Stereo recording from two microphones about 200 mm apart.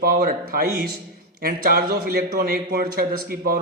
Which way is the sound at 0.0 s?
45° right (ahead or behind).